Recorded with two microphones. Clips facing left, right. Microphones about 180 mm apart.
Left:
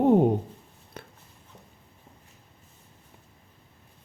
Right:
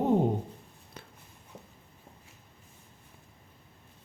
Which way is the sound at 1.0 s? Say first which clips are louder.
Left 5 dB; 60° left (ahead or behind).